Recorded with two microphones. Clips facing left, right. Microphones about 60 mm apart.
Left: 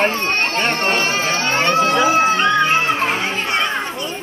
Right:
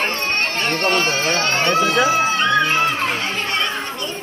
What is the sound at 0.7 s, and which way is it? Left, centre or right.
Speech, left.